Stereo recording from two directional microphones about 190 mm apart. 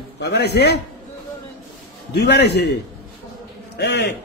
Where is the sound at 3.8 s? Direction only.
60° left (ahead or behind).